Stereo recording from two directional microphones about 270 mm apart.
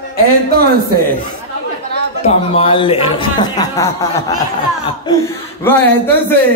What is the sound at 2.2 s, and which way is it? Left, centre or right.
A man's voice, left.